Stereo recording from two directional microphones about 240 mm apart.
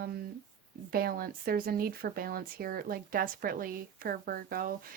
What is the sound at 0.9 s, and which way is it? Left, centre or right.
Speech, right.